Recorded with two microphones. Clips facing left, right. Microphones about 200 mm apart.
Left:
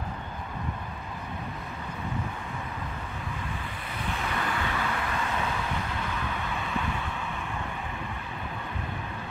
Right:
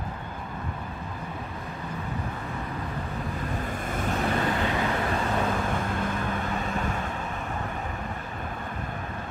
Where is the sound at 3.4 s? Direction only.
45° right (ahead or behind).